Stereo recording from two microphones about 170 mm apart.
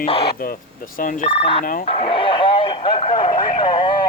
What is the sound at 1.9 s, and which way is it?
Radio, 30° left (ahead or behind).